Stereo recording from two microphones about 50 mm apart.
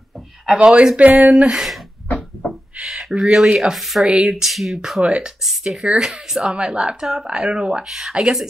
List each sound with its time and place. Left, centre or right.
0.6 s speech: right
2.8 s speech: centre
4.0 s speech: centre
4.5 s speech: centre